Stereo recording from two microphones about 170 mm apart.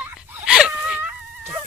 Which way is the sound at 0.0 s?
5° right (ahead or behind).